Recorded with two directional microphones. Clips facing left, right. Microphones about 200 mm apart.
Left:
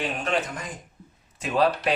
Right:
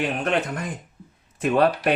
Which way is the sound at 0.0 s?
60° right (ahead or behind).